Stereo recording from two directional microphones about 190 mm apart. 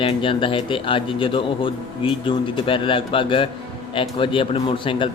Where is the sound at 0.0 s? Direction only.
25° left (ahead or behind).